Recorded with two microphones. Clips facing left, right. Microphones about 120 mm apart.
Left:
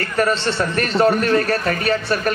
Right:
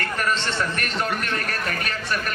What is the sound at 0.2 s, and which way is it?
A man's voice, 30° left (ahead or behind).